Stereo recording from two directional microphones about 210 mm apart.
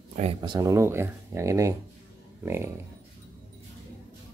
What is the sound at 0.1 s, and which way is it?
Speech, 30° right (ahead or behind).